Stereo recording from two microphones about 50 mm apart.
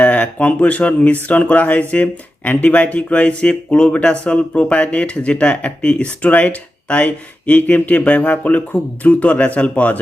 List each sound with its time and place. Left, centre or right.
0.0 s speech: left